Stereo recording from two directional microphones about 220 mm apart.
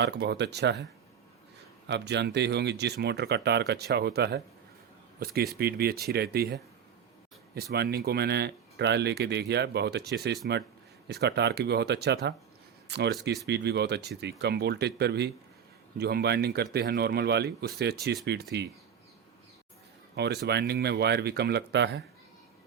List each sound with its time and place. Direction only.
0.0 s speech: 50° right (ahead or behind)
1.9 s speech: 50° right (ahead or behind)
20.1 s speech: 50° right (ahead or behind)